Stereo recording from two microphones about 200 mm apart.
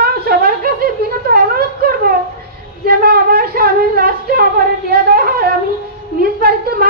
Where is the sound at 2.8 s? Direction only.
50° right (ahead or behind).